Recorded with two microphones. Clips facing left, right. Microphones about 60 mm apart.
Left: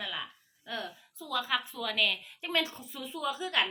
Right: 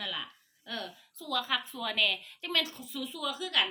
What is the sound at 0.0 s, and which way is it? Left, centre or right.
A woman's voice, centre.